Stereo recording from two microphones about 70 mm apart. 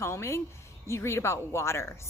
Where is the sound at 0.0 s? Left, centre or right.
Left.